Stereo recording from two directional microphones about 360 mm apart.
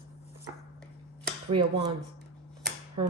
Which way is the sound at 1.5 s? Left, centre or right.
Centre.